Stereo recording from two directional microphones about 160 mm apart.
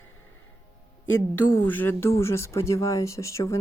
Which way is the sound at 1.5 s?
10° left (ahead or behind).